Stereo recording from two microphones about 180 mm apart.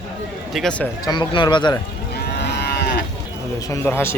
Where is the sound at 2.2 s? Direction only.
65° left (ahead or behind).